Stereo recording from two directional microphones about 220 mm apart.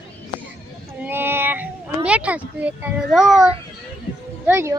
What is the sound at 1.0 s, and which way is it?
A child's voice, 10° right (ahead or behind).